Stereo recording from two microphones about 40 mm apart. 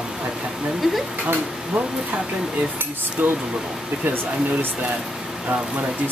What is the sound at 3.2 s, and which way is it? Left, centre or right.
Speech, right.